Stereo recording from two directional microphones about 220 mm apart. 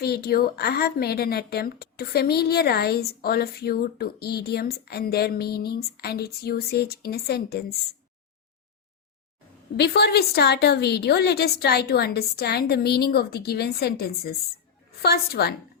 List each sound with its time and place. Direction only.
0.0 s a woman's voice: 45° left (ahead or behind)
9.7 s a woman's voice: 50° left (ahead or behind)